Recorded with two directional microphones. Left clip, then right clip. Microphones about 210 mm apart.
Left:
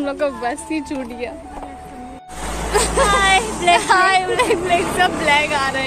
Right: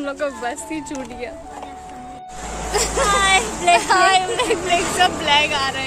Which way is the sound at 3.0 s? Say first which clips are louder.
Left 1 dB; 15° right (ahead or behind).